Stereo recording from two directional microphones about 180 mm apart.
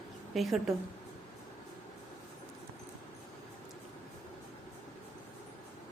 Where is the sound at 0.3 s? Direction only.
Centre (ahead or behind).